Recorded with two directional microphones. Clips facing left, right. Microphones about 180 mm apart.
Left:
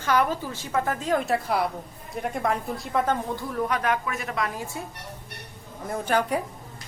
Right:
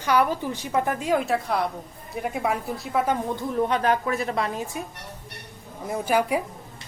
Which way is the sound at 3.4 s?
20° right (ahead or behind).